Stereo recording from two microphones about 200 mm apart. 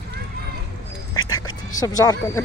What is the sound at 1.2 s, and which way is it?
Quack, 90° left.